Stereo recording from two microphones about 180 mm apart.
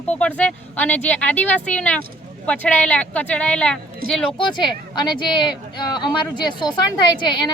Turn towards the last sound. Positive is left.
turn(degrees=25)  # may be behind; listen again after turning